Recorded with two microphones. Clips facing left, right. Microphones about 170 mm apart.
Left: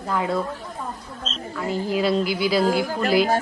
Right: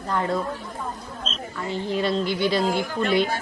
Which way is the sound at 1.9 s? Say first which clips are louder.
Left 2 dB; 5° left (ahead or behind).